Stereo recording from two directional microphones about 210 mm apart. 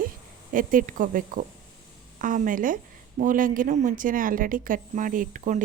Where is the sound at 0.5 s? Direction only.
40° right (ahead or behind).